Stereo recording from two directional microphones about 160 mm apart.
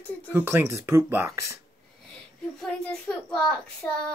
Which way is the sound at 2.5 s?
5° left (ahead or behind).